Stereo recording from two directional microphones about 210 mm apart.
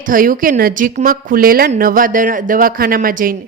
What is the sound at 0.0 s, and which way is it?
A woman's voice, 40° right (ahead or behind).